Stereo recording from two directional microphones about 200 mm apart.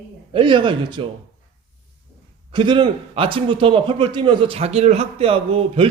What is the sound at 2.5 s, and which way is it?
A man's voice, 25° right (ahead or behind).